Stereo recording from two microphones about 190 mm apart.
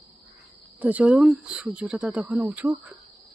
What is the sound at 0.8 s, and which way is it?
Speech, 10° right (ahead or behind).